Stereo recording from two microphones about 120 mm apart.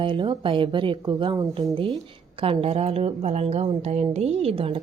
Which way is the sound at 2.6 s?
60° right (ahead or behind).